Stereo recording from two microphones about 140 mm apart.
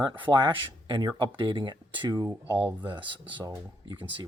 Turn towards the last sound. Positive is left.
turn(degrees=-35)  # may be behind; listen again after turning